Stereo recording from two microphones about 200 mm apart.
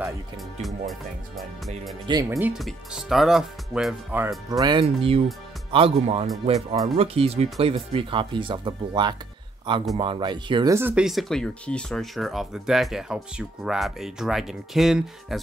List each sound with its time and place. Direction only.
0.6 s speech: centre (ahead or behind)
2.0 s speech: 15° right (ahead or behind)
4.5 s speech: 20° right (ahead or behind); by 15.4 s centre (ahead or behind)